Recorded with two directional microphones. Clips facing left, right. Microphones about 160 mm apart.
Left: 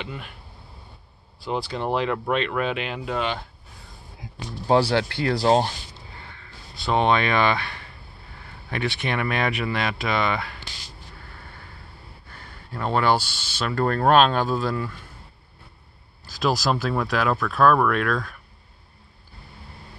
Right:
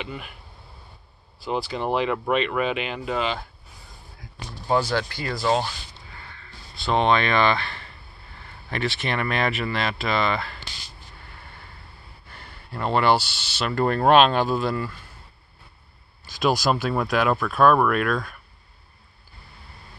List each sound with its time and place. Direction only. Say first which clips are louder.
0.0 s speech: right 1 dB; 5° right (ahead or behind)
1.4 s speech: even; centre (ahead or behind)
4.6 s speech: left 3 dB; 35° left (ahead or behind)
4.9 s speech: left 4 dB; 65° left (ahead or behind)
5.4 s speech: left 3 dB; 40° left (ahead or behind)
6.9 s speech: even; 10° left (ahead or behind)
12.7 s speech: right 1 dB; 5° right (ahead or behind)
16.3 s speech: right 1 dB; 15° right (ahead or behind)